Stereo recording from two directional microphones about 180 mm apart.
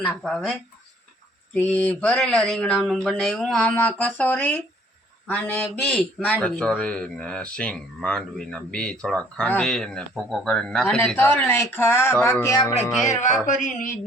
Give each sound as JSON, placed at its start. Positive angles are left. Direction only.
{"t": 0.2, "sound": "a man's voice", "side_deg": 0}
{"t": 1.5, "sound": "a man's voice", "side_deg": 10}
{"t": 13.5, "sound": "speech", "side_deg": 45}